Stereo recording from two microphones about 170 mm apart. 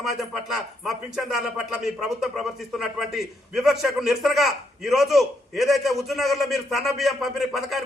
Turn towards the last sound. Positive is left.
turn(degrees=0)  # may be behind; listen again after turning